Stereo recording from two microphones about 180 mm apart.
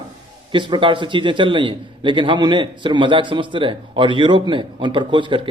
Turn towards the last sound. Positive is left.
turn(degrees=-25)  # may be behind; listen again after turning